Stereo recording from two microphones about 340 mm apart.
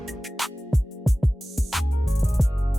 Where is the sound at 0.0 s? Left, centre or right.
Centre.